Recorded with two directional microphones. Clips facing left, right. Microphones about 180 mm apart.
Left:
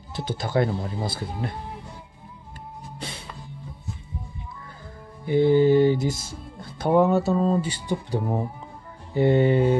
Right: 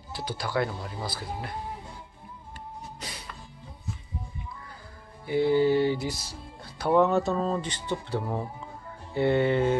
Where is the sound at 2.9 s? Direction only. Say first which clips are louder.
Left 5 dB; 25° left (ahead or behind).